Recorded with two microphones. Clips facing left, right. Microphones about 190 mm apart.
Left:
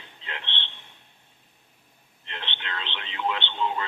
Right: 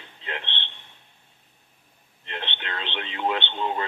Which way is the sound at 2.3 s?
45° right (ahead or behind).